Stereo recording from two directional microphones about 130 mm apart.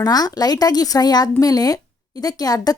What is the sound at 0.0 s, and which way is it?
Speech, 30° left (ahead or behind).